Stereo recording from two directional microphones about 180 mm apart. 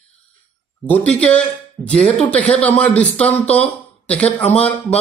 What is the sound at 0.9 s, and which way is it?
A man's voice, 5° left (ahead or behind).